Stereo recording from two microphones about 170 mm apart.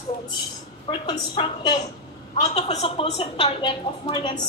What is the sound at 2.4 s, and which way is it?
A woman's voice, 40° left (ahead or behind).